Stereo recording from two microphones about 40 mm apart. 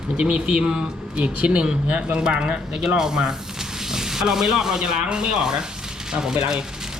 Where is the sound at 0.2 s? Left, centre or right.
Right; by 4.8 s centre.